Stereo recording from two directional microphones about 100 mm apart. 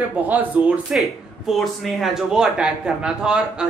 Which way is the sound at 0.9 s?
Centre (ahead or behind).